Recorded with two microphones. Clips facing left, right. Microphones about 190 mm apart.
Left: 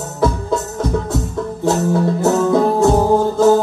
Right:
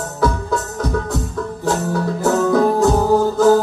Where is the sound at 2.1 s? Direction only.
25° left (ahead or behind).